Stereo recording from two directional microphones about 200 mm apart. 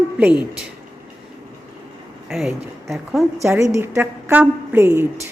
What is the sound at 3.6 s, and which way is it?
A woman's voice, 15° right (ahead or behind).